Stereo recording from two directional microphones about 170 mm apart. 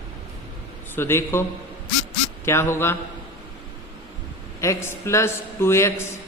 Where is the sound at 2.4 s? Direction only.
15° left (ahead or behind).